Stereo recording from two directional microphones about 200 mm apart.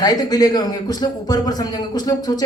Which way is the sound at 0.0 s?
20° left (ahead or behind).